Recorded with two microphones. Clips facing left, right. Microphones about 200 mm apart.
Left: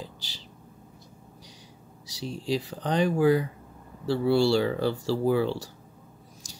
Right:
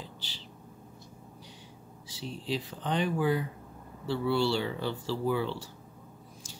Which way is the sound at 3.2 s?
90° left.